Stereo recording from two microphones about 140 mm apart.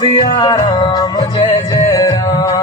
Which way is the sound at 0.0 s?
30° left (ahead or behind).